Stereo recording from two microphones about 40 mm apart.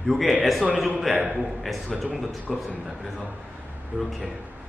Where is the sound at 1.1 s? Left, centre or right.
Centre.